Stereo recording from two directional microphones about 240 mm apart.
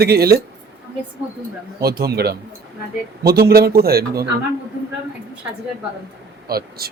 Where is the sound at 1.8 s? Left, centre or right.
Right.